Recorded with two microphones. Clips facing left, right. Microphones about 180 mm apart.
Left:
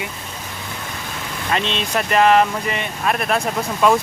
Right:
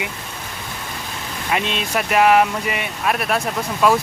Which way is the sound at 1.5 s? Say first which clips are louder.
Even; 10° right (ahead or behind).